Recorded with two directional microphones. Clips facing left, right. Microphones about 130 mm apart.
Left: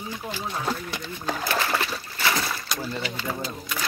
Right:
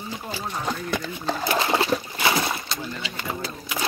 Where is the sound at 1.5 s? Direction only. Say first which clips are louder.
Right 6 dB; 25° right (ahead or behind).